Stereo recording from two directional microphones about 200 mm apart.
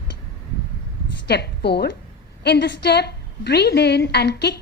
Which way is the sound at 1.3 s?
55° left (ahead or behind).